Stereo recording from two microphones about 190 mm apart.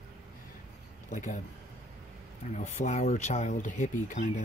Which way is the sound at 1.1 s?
40° left (ahead or behind).